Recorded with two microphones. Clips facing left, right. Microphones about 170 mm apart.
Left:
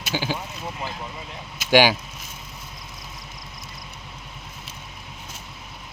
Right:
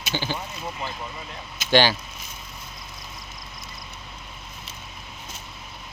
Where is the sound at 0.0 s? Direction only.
5° left (ahead or behind).